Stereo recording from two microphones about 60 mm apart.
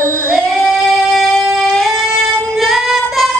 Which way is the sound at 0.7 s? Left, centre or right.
Centre.